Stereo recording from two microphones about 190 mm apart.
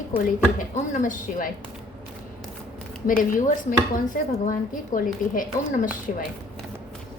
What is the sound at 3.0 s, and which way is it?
A woman's voice, 45° left (ahead or behind).